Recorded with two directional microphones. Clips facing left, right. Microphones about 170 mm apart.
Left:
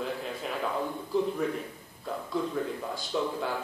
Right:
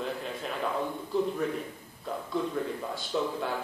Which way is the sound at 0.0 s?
Centre (ahead or behind).